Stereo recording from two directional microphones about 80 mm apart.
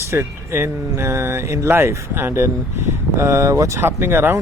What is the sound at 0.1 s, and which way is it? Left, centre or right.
Speech, right.